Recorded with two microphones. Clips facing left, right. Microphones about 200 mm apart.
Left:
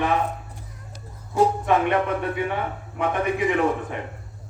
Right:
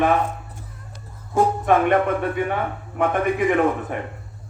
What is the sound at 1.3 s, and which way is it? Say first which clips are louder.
Speech: right 2 dB; 50° right (ahead or behind).